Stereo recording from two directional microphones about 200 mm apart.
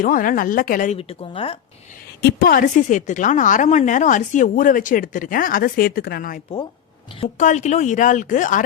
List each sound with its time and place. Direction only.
0.0 s a woman's voice: 40° left (ahead or behind)
0.9 s a woman's voice: 30° left (ahead or behind)
2.2 s a woman's voice: 45° left (ahead or behind)